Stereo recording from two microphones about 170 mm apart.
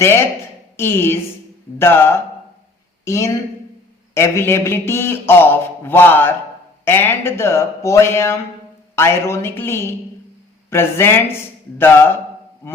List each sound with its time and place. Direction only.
0.0 s a man's voice: 15° left (ahead or behind)